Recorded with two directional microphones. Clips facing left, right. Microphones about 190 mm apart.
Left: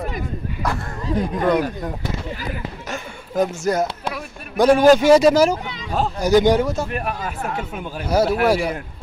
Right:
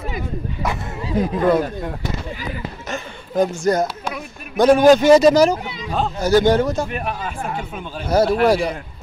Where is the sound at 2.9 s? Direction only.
5° left (ahead or behind).